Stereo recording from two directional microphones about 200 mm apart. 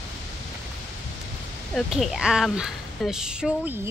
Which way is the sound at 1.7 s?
Centre (ahead or behind).